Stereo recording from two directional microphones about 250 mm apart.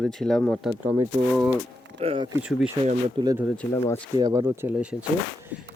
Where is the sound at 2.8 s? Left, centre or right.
Centre.